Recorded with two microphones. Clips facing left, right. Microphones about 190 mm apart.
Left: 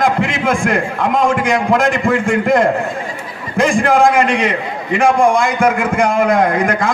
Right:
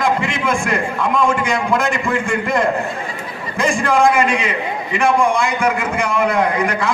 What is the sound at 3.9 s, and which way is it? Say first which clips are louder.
A man's voice: even; 50° left (ahead or behind).